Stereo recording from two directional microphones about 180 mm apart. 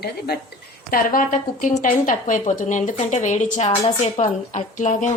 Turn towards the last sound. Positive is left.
turn(degrees=45)  # may be behind; listen again after turning